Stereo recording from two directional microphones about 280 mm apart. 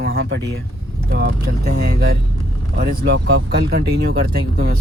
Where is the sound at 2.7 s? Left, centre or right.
Right.